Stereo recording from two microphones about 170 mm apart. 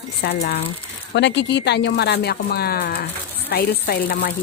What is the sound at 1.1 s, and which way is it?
Speech, 90° left.